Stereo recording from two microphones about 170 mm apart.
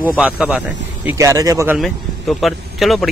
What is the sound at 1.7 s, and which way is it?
Speech, centre (ahead or behind).